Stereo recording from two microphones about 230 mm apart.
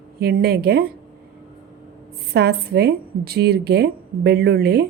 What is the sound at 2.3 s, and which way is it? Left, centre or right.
A woman's voice, right.